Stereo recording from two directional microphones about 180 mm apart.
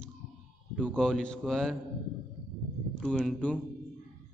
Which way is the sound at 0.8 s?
5° left (ahead or behind).